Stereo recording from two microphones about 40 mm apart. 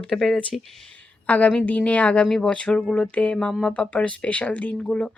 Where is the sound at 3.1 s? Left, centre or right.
Left.